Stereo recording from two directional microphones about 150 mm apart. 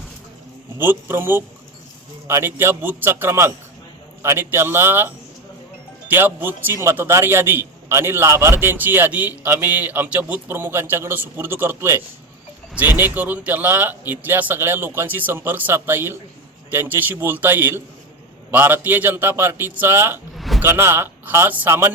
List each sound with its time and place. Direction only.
0.8 s a man's voice: 15° right (ahead or behind)
20.3 s a sound: centre (ahead or behind)
20.6 s a man's voice: 15° right (ahead or behind)